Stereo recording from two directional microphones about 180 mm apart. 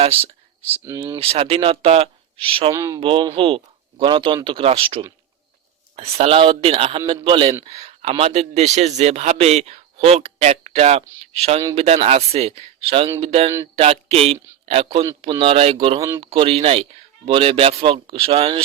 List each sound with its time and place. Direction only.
0.9 s speech: 15° right (ahead or behind)
1.2 s a man's voice: 35° right (ahead or behind)
2.7 s speech: 15° right (ahead or behind)
3.0 s a man's voice: 30° right (ahead or behind)
7.6 s a sound: 35° right (ahead or behind)
8.1 s a man's voice: 35° right (ahead or behind)
13.7 s a sound: 35° right (ahead or behind)
14.7 s a man's voice: 35° right (ahead or behind)
16.0 s speech: 15° right (ahead or behind)
16.2 s a man's voice: 30° right (ahead or behind)